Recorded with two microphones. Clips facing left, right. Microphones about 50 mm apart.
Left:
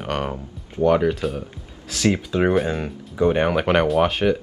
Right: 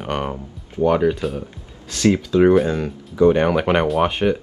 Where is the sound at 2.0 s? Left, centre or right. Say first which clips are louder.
Right 5 dB; left.